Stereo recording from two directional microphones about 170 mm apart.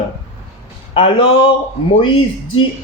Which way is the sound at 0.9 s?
30° left (ahead or behind).